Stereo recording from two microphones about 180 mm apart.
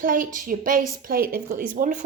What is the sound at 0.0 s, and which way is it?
A woman's voice, 50° right (ahead or behind).